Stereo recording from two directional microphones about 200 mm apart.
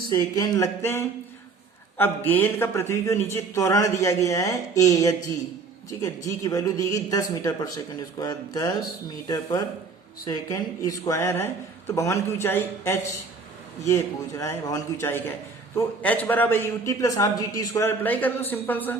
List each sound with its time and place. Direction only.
0.1 s a man's voice: 15° left (ahead or behind)
6.2 s a man's voice: 15° left (ahead or behind)